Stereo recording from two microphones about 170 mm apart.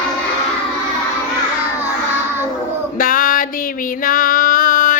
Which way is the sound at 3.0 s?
55° left (ahead or behind).